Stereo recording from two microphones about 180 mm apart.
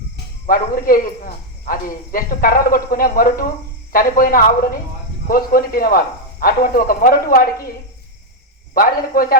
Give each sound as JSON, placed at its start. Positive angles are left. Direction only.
{"t": 0.4, "sound": "a woman's voice", "side_deg": 55}
{"t": 8.7, "sound": "a woman's voice", "side_deg": 55}